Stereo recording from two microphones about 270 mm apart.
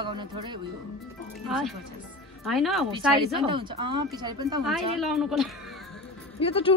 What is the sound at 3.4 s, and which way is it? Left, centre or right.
A woman's voice, centre.